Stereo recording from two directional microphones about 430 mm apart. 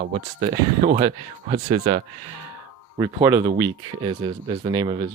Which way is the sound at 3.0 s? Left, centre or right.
Centre.